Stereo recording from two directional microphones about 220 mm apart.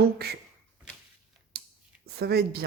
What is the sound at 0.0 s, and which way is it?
Speech, 45° right (ahead or behind).